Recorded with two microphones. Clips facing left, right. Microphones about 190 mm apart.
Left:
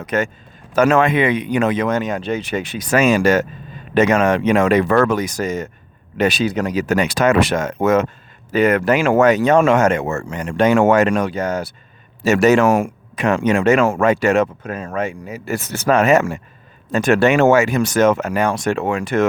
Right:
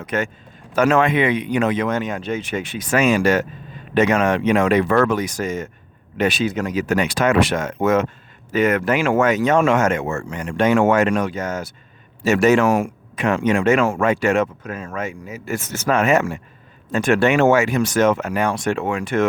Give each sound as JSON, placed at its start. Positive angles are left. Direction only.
{"t": 0.0, "sound": "speech", "side_deg": 40}